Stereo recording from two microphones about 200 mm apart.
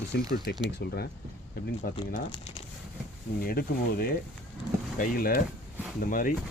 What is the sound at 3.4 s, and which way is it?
Speech, 50° left (ahead or behind).